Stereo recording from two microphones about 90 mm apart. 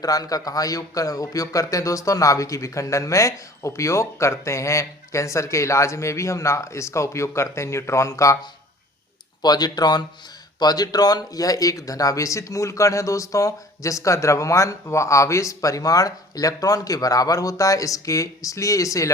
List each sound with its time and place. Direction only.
0.0 s speech: 45° left (ahead or behind)
9.4 s speech: 50° left (ahead or behind)